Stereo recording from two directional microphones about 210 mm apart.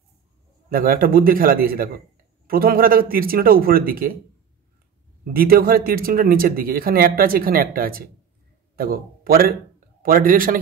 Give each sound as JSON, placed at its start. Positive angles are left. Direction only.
{"t": 0.7, "sound": "speech", "side_deg": -45}
{"t": 5.2, "sound": "a man's voice", "side_deg": -45}